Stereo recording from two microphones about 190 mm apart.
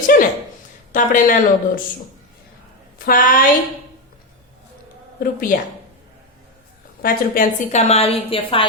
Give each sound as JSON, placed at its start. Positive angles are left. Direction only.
{"t": 0.1, "sound": "a sound", "side_deg": 50}
{"t": 0.9, "sound": "speech", "side_deg": 45}
{"t": 3.1, "sound": "speech", "side_deg": 45}
{"t": 5.2, "sound": "speech", "side_deg": 50}
{"t": 7.0, "sound": "a woman's voice", "side_deg": 45}